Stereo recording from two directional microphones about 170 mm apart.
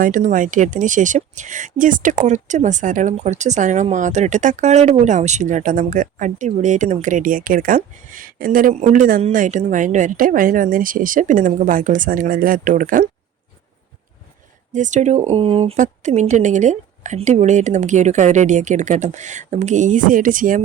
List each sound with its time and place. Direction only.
0.0 s speech: 50° right (ahead or behind)
14.7 s speech: 45° right (ahead or behind)